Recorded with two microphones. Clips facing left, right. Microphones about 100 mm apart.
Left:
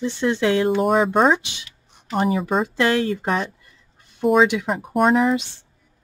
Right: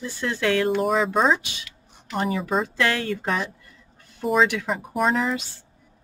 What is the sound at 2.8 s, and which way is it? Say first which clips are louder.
Speech: left 4 dB; 20° left (ahead or behind).